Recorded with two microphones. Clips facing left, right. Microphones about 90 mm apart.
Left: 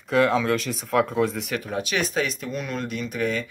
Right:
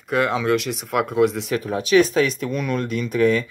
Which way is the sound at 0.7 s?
65° right (ahead or behind).